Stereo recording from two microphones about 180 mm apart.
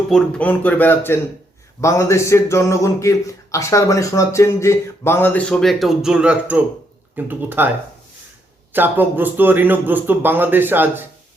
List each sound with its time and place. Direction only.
0.1 s a man's voice: 5° left (ahead or behind); by 7.7 s 10° right (ahead or behind)
8.7 s a man's voice: 10° right (ahead or behind)